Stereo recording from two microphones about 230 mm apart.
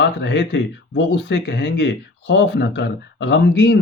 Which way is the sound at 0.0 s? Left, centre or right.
Left.